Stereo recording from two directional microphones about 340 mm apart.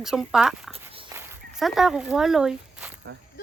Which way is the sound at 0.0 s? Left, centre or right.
Centre.